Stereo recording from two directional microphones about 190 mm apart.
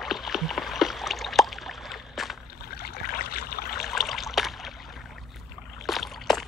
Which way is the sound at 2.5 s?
55° left (ahead or behind).